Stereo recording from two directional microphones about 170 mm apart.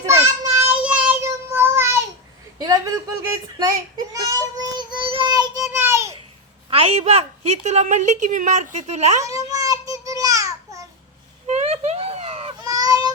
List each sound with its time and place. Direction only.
0.0 s child singing: 15° right (ahead or behind)
2.6 s speech: 20° right (ahead or behind)
4.1 s child singing: 20° right (ahead or behind)
6.7 s a woman's voice: 35° right (ahead or behind)
9.2 s babbling: 20° right (ahead or behind)
11.4 s a sound: 40° right (ahead or behind)
12.6 s a sound: 20° right (ahead or behind)